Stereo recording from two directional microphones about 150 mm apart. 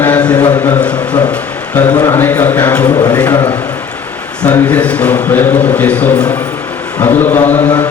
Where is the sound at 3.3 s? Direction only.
25° left (ahead or behind).